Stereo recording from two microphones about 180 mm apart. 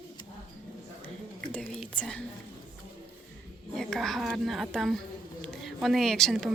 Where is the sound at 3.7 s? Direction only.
Centre (ahead or behind).